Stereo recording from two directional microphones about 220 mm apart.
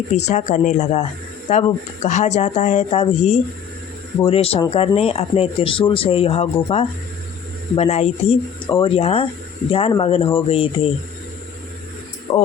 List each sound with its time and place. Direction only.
0.1 s speech: 30° left (ahead or behind)
12.3 s speech: 25° left (ahead or behind)